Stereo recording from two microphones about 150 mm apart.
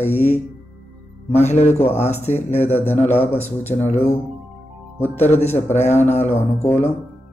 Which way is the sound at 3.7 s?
45° left (ahead or behind).